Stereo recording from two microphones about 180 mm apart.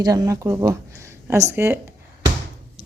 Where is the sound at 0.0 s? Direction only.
20° right (ahead or behind).